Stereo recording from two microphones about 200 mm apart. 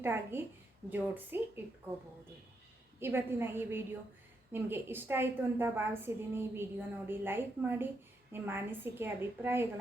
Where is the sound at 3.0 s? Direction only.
10° right (ahead or behind).